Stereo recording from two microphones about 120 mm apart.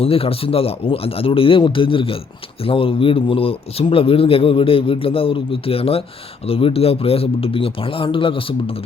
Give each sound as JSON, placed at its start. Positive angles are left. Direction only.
{"t": 0.0, "sound": "a man's voice", "side_deg": 50}